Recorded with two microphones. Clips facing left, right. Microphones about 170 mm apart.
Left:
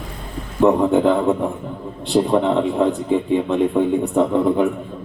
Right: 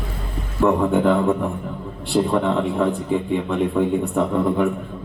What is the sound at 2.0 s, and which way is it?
A man's voice, 20° left (ahead or behind).